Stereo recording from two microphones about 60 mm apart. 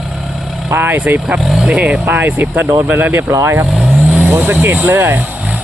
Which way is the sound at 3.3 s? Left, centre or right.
Right.